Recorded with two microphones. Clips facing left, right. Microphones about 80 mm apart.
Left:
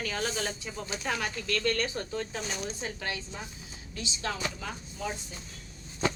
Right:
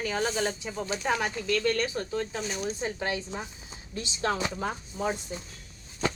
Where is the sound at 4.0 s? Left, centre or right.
Right.